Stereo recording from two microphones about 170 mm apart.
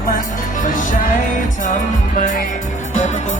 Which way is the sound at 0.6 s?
50° left (ahead or behind).